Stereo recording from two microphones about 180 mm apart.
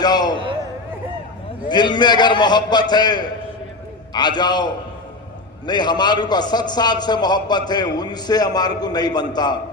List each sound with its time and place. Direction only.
0.0 s a man's voice: 25° left (ahead or behind)
1.6 s a man's voice: 25° left (ahead or behind)